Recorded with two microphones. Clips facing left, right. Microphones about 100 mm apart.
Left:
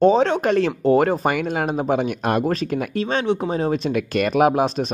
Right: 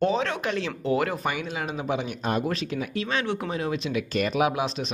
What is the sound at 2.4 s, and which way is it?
Speech, 40° left (ahead or behind).